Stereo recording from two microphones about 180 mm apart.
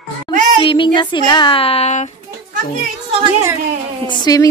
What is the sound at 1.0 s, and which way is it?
Speech, 25° left (ahead or behind).